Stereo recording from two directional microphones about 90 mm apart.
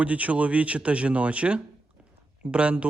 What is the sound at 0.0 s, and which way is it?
Speech, 15° right (ahead or behind).